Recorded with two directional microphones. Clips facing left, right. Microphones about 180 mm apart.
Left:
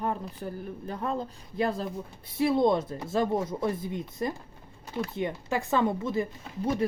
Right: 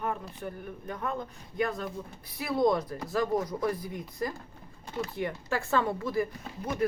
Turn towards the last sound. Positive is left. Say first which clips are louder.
# left 2 dB
turn(degrees=25)  # may be behind; listen again after turning